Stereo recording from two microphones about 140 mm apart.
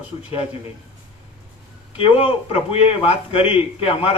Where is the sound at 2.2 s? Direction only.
45° left (ahead or behind).